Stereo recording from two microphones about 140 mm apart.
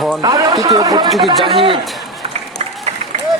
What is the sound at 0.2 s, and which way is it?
Speech, 25° right (ahead or behind).